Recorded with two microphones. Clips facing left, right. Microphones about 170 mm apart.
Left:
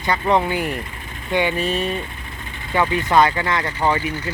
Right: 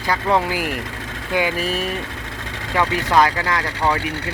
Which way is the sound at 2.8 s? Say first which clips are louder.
Left 2 dB; 80° right.